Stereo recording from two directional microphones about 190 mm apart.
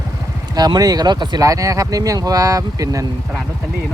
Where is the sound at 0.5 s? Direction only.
20° right (ahead or behind).